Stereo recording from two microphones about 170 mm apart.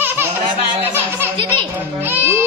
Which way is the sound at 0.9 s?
15° right (ahead or behind).